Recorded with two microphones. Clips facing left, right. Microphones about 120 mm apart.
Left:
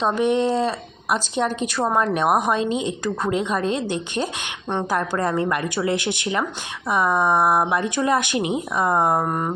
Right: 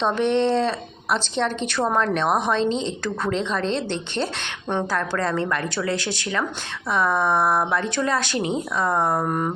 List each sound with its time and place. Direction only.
0.0 s speech: 10° left (ahead or behind)